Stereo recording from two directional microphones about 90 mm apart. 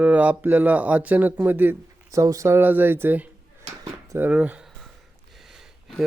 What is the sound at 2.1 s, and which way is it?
Speech, 35° right (ahead or behind).